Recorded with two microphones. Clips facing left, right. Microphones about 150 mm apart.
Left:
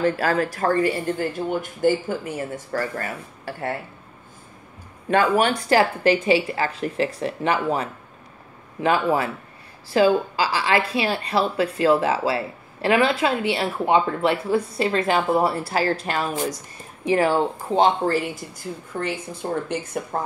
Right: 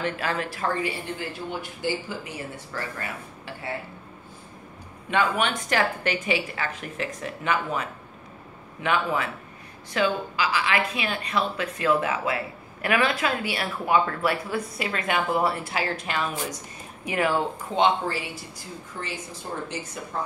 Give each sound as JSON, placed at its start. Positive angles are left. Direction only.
{"t": 0.0, "sound": "speech", "side_deg": 40}
{"t": 5.1, "sound": "speech", "side_deg": 40}
{"t": 18.9, "sound": "a woman's voice", "side_deg": 60}